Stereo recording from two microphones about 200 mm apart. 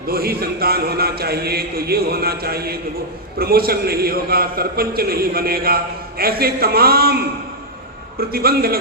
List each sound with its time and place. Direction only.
0.1 s a man's voice: 50° right (ahead or behind)
8.3 s a man's voice: 50° right (ahead or behind)